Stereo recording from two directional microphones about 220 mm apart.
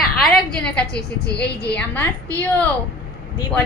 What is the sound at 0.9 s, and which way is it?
Speech, 50° left (ahead or behind).